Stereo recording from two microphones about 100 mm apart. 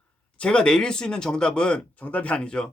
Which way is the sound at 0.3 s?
10° left (ahead or behind).